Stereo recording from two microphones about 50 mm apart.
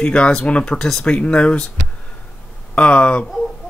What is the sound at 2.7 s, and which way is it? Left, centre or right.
Speech, left.